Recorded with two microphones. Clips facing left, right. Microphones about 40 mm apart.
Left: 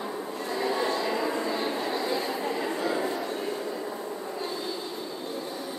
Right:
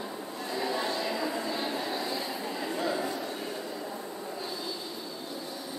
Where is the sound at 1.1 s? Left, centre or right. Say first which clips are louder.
Left 4 dB; left.